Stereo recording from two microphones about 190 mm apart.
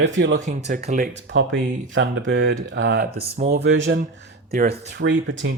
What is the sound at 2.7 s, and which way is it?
Speech, 60° right (ahead or behind).